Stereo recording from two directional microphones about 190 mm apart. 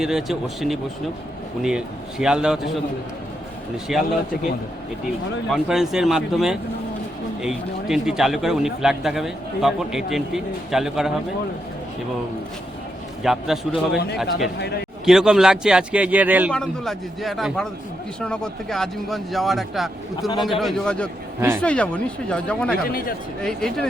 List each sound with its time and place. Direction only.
0.0 s a man's voice: centre (ahead or behind)
3.9 s a man's voice: centre (ahead or behind)
5.5 s a man's voice: centre (ahead or behind)
13.2 s a man's voice: centre (ahead or behind)
16.5 s a man's voice: 5° left (ahead or behind)
22.9 s a man's voice: 50° left (ahead or behind)
23.4 s a man's voice: 5° left (ahead or behind)